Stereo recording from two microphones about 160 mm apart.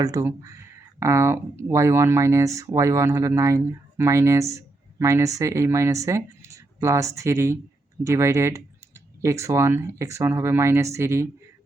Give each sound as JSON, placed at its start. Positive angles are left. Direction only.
{"t": 0.0, "sound": "speech", "side_deg": -20}